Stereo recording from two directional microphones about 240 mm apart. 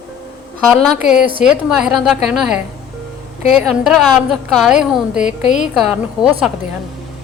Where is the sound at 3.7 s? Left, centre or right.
Centre.